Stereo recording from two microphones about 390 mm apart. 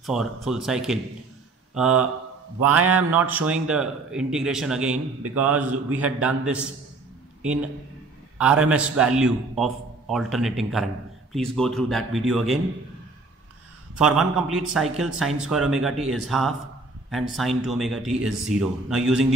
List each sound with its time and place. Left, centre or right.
0.0 s a man's voice: centre
2.8 s a sound: right
3.1 s a man's voice: centre
8.4 s a man's voice: centre
13.9 s a man's voice: centre